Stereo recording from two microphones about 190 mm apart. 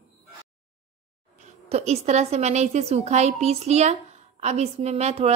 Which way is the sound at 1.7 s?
35° right (ahead or behind).